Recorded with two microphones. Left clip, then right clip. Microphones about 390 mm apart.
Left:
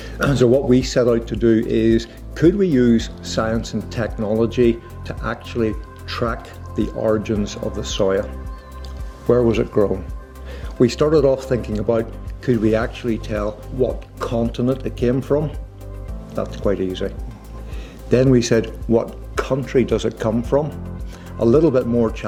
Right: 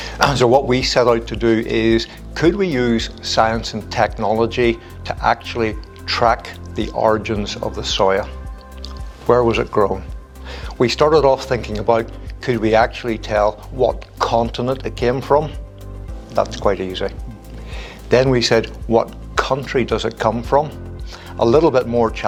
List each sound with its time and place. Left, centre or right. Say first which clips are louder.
0.0 s speech: right 3 dB; right